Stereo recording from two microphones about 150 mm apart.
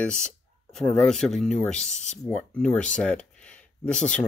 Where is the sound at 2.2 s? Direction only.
5° left (ahead or behind).